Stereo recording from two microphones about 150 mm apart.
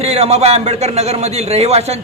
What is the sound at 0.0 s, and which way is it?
A woman's voice, 45° right (ahead or behind).